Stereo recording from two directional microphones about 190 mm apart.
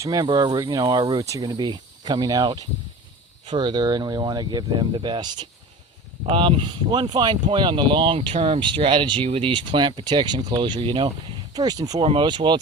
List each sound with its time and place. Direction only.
0.0 s speech: 20° right (ahead or behind)